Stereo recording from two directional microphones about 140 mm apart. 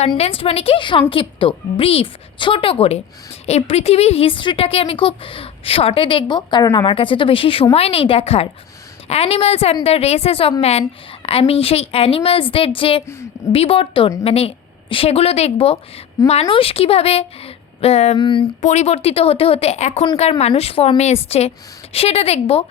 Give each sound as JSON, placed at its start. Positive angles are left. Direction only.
{"t": 0.2, "sound": "a woman's voice", "side_deg": 45}
{"t": 18.2, "sound": "speech", "side_deg": 35}
{"t": 18.6, "sound": "a woman's voice", "side_deg": 55}